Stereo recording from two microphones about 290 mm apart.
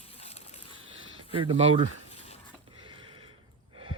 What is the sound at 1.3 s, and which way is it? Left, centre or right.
Speech, centre.